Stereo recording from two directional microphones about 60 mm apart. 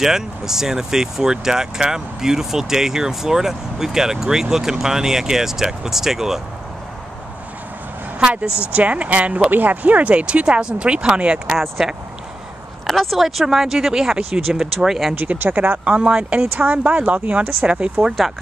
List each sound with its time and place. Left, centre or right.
0.0 s speech: centre
8.2 s speech: centre
11.5 s speech: centre
15.1 s speech: right
15.8 s speech: centre
16.5 s speech: right